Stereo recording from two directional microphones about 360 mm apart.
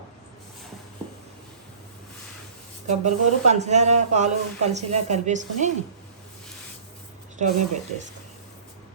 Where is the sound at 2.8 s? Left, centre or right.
Centre.